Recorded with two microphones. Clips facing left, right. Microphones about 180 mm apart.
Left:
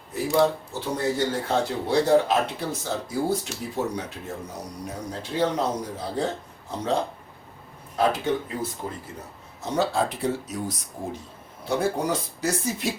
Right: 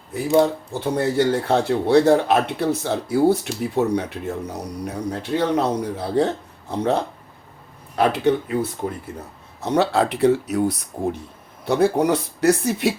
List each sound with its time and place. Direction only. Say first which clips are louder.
0.7 s speech: right 5 dB; 60° right (ahead or behind)
7.9 s speech: right 4 dB; 70° right (ahead or behind)
9.6 s speech: right 5 dB; 65° right (ahead or behind)